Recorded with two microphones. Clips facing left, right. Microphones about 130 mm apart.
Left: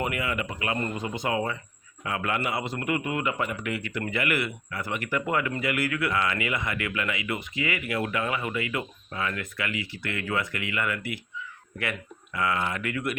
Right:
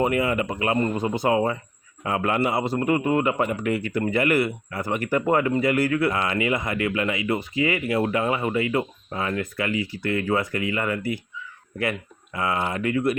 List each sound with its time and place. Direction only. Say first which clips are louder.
0.0 s speech: right 7 dB; 35° right (ahead or behind)